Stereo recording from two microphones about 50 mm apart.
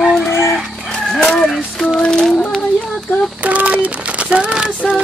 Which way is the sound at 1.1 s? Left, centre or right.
Centre.